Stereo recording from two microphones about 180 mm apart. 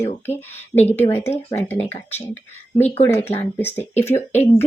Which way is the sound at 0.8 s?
10° left (ahead or behind).